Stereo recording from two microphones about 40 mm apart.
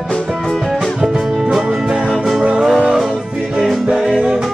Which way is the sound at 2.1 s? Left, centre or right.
Centre.